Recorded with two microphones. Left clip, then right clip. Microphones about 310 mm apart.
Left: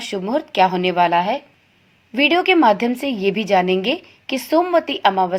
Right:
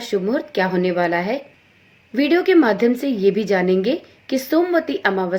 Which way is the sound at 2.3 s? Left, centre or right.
Centre.